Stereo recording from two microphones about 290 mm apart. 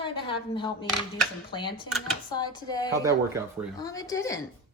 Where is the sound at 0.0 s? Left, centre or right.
Centre.